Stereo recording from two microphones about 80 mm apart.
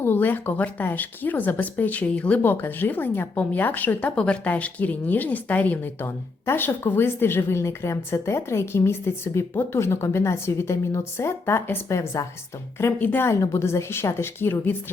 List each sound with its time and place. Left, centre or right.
0.0 s speech: left
13.0 s speech: left
13.2 s a woman's voice: left